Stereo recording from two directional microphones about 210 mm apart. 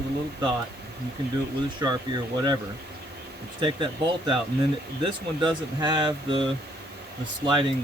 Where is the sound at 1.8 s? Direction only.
20° right (ahead or behind).